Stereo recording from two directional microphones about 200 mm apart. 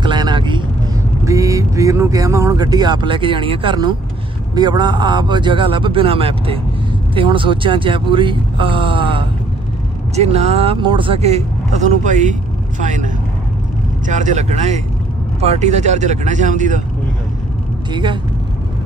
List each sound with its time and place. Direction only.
0.0 s vehicle: 20° right (ahead or behind)
1.2 s a man's voice: 15° right (ahead or behind); by 16.8 s 40° right (ahead or behind)